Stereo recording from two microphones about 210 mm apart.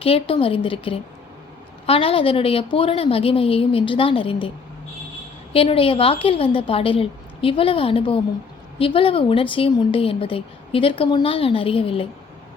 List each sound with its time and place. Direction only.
0.0 s speech: 25° left (ahead or behind)
5.5 s speech: 25° left (ahead or behind)